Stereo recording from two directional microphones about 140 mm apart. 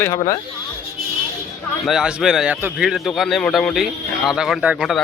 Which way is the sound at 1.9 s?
Centre (ahead or behind).